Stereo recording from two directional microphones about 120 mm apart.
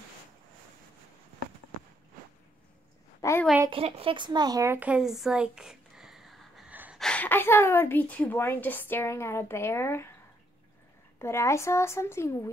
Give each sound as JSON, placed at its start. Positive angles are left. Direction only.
{"t": 3.2, "sound": "a sound", "side_deg": 25}
{"t": 3.7, "sound": "speech", "side_deg": -50}
{"t": 4.7, "sound": "a sound", "side_deg": -10}
{"t": 6.7, "sound": "gasp", "side_deg": -15}
{"t": 7.0, "sound": "a woman's voice", "side_deg": 10}
{"t": 11.1, "sound": "a woman's voice", "side_deg": 25}